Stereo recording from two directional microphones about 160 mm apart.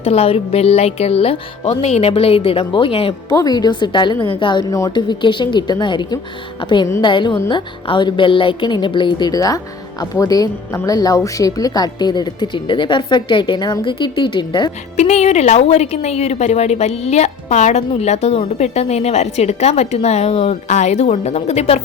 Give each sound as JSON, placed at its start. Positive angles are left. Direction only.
{"t": 0.0, "sound": "speech", "side_deg": 40}
{"t": 3.3, "sound": "a woman's voice", "side_deg": 25}
{"t": 14.9, "sound": "a woman's voice", "side_deg": 45}